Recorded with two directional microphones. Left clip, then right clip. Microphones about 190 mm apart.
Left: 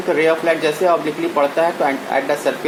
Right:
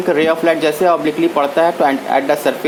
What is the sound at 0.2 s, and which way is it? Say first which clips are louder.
Speech: even; 50° right (ahead or behind).